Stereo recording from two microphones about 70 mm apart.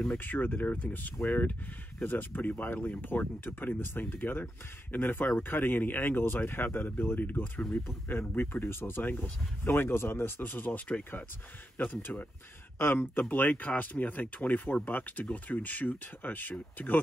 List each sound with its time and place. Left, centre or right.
0.2 s speech: left